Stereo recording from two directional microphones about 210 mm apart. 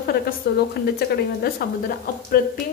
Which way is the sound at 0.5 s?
45° left (ahead or behind).